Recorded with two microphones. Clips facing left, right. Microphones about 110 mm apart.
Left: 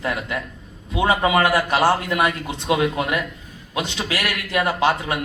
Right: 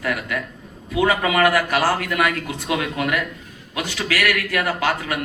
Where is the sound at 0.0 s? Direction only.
25° left (ahead or behind).